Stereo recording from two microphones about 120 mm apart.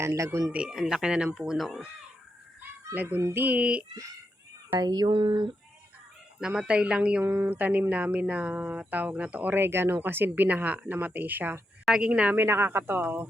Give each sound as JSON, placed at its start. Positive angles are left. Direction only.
{"t": 0.0, "sound": "speech", "side_deg": -25}
{"t": 0.5, "sound": "speech", "side_deg": -5}
{"t": 2.6, "sound": "a sound", "side_deg": -15}
{"t": 3.2, "sound": "speech", "side_deg": -20}
{"t": 4.8, "sound": "a sound", "side_deg": -35}
{"t": 6.4, "sound": "speech", "side_deg": -10}